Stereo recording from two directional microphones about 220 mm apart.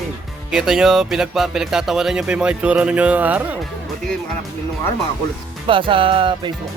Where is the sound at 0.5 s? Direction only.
5° right (ahead or behind).